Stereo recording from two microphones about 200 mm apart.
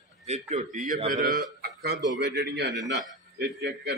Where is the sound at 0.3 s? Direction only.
35° right (ahead or behind); by 2.8 s 55° right (ahead or behind).